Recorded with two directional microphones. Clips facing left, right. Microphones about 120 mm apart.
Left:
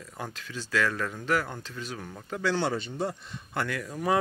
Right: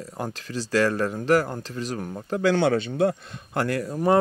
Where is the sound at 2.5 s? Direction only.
60° right (ahead or behind).